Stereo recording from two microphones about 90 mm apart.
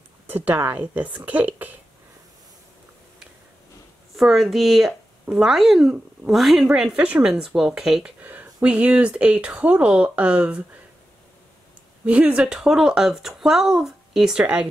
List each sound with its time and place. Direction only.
0.3 s speech: 20° right (ahead or behind)
4.2 s speech: centre (ahead or behind)
8.2 s a sound: 20° right (ahead or behind)
8.5 s speech: 15° right (ahead or behind)
12.1 s speech: 15° right (ahead or behind)
14.4 s speech: 20° right (ahead or behind)